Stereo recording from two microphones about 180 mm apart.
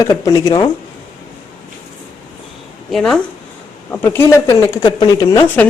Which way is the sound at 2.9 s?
5° left (ahead or behind).